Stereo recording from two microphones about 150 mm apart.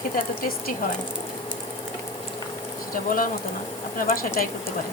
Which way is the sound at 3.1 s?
65° left (ahead or behind).